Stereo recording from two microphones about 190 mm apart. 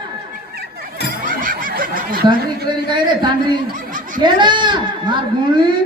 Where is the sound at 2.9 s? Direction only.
25° right (ahead or behind).